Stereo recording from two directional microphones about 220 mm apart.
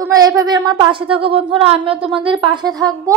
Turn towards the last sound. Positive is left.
turn(degrees=-15)  # may be behind; listen again after turning